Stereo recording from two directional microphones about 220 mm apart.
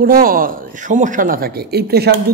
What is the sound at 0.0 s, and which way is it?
A man's voice, 40° right (ahead or behind).